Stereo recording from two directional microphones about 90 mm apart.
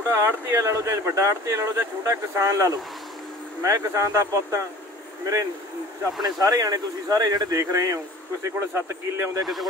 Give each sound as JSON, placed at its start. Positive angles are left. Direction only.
{"t": 0.1, "sound": "speech", "side_deg": -30}
{"t": 6.2, "sound": "speech", "side_deg": -45}
{"t": 9.4, "sound": "speech", "side_deg": 0}